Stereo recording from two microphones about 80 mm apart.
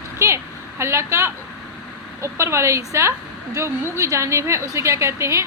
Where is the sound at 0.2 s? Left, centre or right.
Right.